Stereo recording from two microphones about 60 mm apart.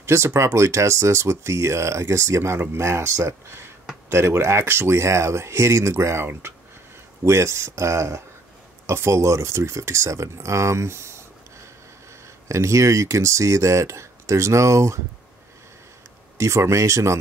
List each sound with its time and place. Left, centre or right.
0.0 s speech: right
12.4 s speech: right
16.3 s speech: right